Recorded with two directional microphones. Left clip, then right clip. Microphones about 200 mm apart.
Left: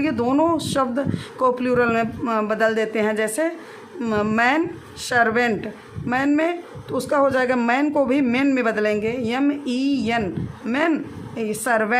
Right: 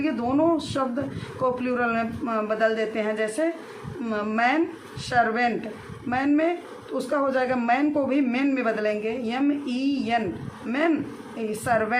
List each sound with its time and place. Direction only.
0.0 s a woman's voice: 50° left (ahead or behind)